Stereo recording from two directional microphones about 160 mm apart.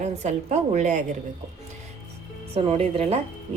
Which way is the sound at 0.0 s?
45° right (ahead or behind).